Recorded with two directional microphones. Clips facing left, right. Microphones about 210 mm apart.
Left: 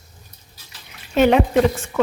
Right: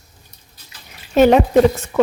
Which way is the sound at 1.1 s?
40° right (ahead or behind).